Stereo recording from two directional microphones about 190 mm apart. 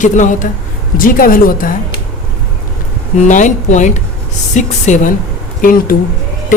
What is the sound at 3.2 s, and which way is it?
A woman's voice, 40° left (ahead or behind).